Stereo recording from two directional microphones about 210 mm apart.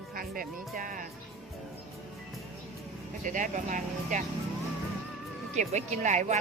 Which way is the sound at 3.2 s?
35° right (ahead or behind).